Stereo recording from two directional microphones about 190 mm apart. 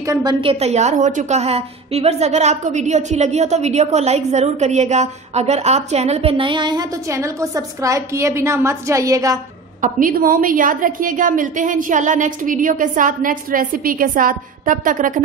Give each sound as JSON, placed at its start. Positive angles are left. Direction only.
{"t": 0.1, "sound": "a woman's voice", "side_deg": -20}
{"t": 9.8, "sound": "a woman's voice", "side_deg": -45}